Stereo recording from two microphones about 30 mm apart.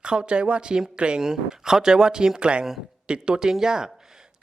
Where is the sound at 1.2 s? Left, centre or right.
Right.